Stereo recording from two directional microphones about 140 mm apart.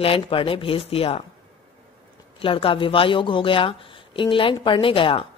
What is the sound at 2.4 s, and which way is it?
Speech, 40° left (ahead or behind).